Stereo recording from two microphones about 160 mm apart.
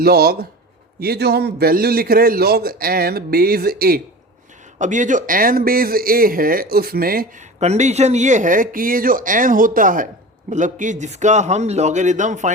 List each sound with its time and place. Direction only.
0.0 s a man's voice: 75° right (ahead or behind)
4.8 s speech: 50° right (ahead or behind)
7.6 s a man's voice: 45° right (ahead or behind)